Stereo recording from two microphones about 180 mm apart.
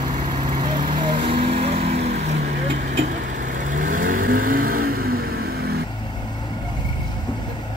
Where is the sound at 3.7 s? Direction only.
50° right (ahead or behind).